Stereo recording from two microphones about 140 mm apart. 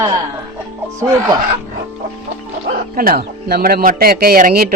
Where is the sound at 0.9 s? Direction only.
20° right (ahead or behind).